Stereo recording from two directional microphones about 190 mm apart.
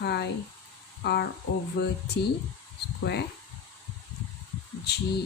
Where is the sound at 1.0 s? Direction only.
60° left (ahead or behind).